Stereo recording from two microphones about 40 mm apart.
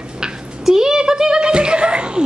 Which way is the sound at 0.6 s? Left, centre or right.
Centre.